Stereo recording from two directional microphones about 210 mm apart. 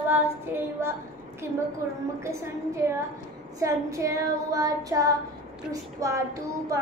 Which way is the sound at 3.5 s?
15° right (ahead or behind).